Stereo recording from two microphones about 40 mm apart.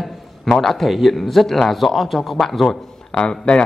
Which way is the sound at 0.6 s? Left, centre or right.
Centre.